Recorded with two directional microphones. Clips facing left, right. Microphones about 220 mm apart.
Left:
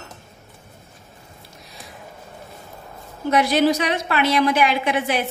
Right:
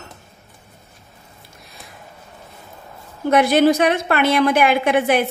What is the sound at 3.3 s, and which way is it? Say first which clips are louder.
A woman's voice: right 4 dB; 55° right (ahead or behind).